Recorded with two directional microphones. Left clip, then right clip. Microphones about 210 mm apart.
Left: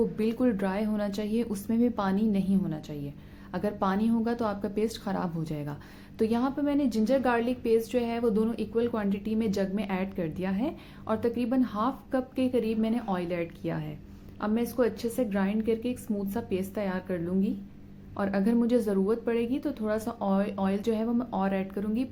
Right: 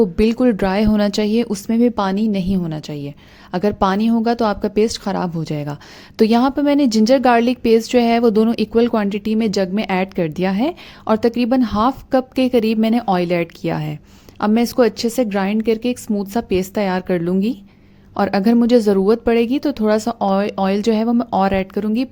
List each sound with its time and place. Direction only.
0.0 s a woman's voice: 40° right (ahead or behind)